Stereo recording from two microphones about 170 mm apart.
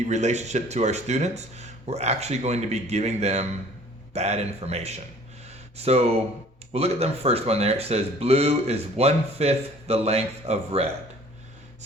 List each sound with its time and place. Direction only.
0.0 s a man's voice: 45° right (ahead or behind)